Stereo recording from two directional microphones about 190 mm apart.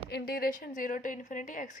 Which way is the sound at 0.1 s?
55° left (ahead or behind).